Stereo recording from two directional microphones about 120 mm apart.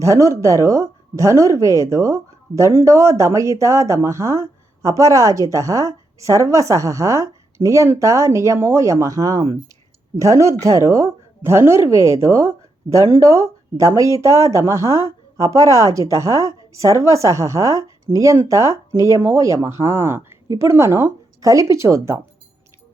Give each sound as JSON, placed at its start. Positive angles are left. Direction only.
{"t": 0.0, "sound": "speech", "side_deg": -25}